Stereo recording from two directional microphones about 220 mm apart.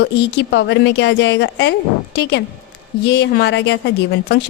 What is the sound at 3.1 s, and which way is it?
Speech, 50° left (ahead or behind).